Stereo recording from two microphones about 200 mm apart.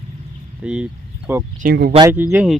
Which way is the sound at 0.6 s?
5° right (ahead or behind).